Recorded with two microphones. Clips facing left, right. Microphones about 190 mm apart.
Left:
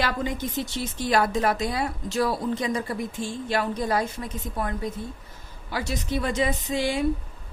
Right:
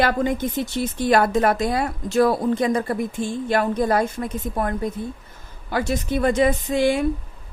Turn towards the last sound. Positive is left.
turn(degrees=-55)  # may be behind; listen again after turning